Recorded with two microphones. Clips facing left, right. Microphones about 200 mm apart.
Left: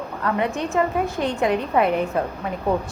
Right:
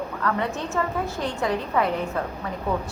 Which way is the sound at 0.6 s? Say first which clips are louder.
Left 5 dB; 20° left (ahead or behind).